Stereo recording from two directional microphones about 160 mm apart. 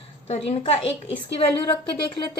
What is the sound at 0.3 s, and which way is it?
Speech, 40° left (ahead or behind).